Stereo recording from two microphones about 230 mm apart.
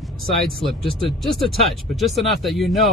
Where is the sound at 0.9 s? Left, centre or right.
Centre.